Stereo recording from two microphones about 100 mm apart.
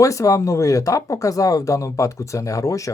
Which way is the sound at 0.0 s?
30° left (ahead or behind).